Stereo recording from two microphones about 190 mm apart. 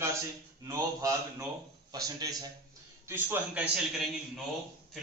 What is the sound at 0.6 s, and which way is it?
A man's voice, 15° right (ahead or behind).